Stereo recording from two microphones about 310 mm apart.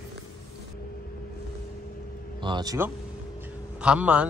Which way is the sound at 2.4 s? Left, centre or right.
Centre.